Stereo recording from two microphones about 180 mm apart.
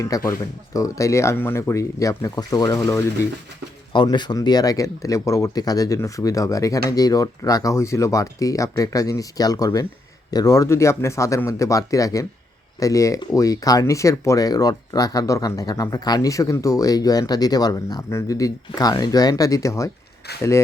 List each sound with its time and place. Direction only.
0.0 s speech: 15° left (ahead or behind)